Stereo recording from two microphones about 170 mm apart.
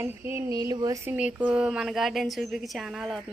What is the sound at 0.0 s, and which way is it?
A woman's voice, 15° right (ahead or behind).